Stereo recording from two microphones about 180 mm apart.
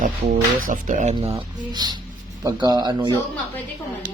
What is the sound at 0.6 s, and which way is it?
Speech, 45° right (ahead or behind).